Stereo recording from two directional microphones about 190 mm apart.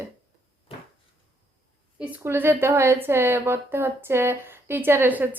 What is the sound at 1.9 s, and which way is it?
Speech, 10° right (ahead or behind).